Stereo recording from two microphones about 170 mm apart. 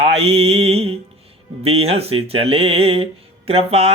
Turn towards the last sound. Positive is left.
turn(degrees=-35)  # may be behind; listen again after turning